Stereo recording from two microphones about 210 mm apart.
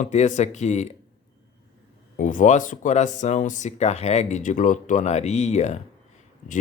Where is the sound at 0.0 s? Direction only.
35° left (ahead or behind).